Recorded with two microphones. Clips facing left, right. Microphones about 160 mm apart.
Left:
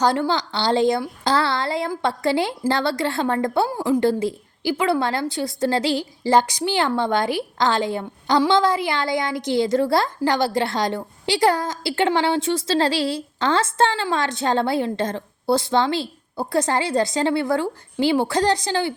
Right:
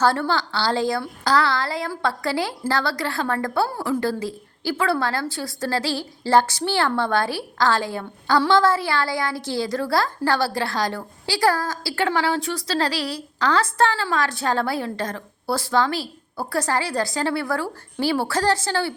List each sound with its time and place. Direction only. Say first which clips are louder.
0.0 s a woman's voice: left 1 dB; 15° left (ahead or behind)